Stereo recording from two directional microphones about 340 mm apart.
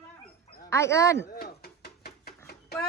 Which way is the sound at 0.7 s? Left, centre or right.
Centre.